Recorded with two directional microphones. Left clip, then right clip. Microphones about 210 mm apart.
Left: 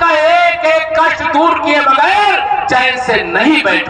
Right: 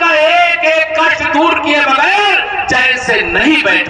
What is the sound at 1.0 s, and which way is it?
Speech, 40° left (ahead or behind).